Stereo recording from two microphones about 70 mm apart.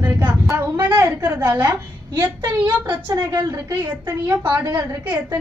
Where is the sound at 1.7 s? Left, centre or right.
Right.